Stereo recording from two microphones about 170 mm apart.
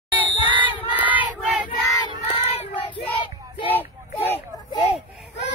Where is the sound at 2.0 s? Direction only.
35° left (ahead or behind).